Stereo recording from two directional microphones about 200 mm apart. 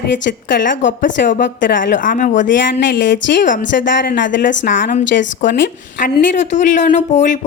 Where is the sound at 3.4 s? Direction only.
40° left (ahead or behind).